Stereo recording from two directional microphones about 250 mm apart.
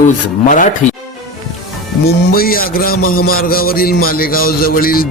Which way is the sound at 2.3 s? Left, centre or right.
Left.